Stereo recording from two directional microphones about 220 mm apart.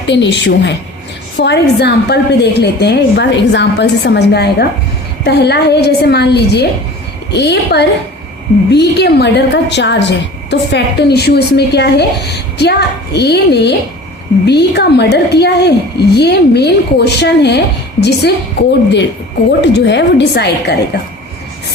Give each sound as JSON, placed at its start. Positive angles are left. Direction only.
{"t": 0.1, "sound": "a woman's voice", "side_deg": 55}
{"t": 19.6, "sound": "a woman's voice", "side_deg": 50}